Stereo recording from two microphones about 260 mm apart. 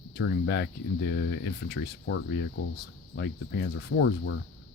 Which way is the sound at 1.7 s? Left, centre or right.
Left.